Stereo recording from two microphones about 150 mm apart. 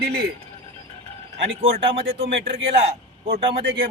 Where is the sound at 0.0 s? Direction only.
90° right.